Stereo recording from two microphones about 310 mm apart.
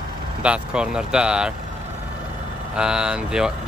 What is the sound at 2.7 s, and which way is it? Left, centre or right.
Speech, centre.